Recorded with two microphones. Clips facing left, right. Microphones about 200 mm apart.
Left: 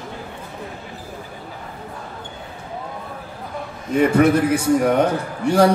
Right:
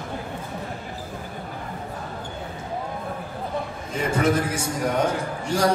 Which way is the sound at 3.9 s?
60° left (ahead or behind).